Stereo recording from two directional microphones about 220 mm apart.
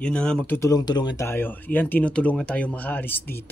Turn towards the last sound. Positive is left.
turn(degrees=10)  # may be behind; listen again after turning